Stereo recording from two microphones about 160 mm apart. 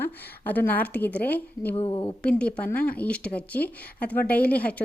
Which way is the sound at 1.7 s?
35° left (ahead or behind).